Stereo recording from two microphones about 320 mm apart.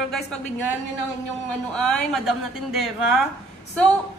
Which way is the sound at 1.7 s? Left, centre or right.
Centre.